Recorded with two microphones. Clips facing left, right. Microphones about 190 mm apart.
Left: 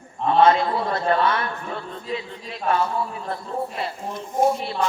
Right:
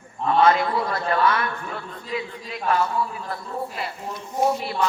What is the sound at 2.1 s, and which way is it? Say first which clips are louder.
A man's voice: right 1 dB; 25° left (ahead or behind).